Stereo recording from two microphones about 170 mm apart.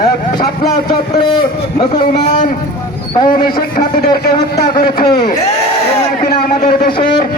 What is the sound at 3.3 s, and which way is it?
Speech, 55° left (ahead or behind).